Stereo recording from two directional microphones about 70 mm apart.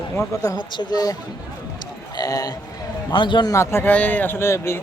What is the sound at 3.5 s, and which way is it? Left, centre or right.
Speech, left.